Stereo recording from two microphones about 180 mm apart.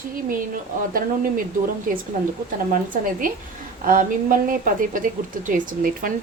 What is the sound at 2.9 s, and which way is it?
A woman's voice, 50° right (ahead or behind).